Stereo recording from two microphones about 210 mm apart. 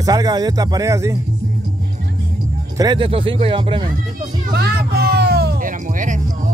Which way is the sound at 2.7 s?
20° right (ahead or behind).